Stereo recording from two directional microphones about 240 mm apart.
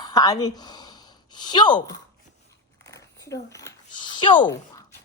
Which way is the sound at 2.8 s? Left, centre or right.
Centre.